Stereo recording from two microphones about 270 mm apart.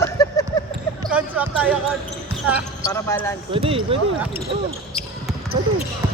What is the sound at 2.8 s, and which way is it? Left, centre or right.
Speech, centre.